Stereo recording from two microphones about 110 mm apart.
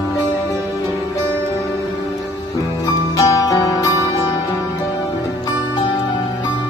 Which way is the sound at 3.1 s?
30° left (ahead or behind).